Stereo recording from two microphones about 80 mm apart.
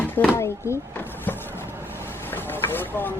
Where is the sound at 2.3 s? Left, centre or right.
Left.